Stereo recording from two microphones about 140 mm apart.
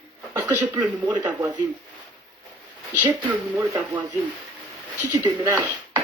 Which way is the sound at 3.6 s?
15° right (ahead or behind).